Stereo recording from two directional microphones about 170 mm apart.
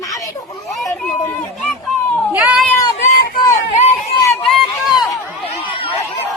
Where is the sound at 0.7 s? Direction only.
Centre (ahead or behind).